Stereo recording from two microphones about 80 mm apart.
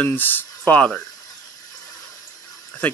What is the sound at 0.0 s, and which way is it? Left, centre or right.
Speech, left.